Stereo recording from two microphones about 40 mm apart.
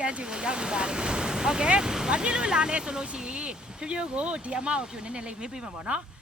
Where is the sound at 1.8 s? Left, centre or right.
Centre.